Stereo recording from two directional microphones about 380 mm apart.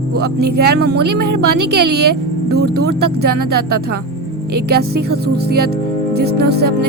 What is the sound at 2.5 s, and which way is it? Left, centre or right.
Speech, right.